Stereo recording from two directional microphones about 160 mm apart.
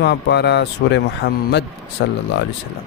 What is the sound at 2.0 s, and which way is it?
Speech, 90° left.